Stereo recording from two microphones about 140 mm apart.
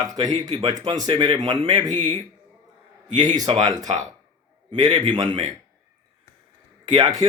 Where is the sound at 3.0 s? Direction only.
30° right (ahead or behind).